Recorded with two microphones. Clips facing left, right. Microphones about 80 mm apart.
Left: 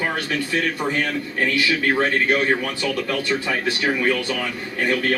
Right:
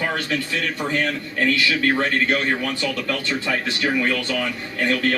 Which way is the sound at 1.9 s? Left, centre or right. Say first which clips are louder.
Left 3 dB; centre.